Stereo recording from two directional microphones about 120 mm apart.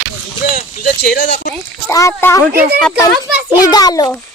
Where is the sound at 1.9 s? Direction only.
25° left (ahead or behind).